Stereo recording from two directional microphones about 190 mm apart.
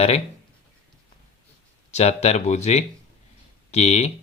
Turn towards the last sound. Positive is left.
turn(degrees=35)  # may be behind; listen again after turning